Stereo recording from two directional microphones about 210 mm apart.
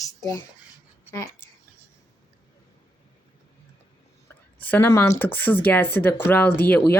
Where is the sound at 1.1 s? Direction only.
15° left (ahead or behind).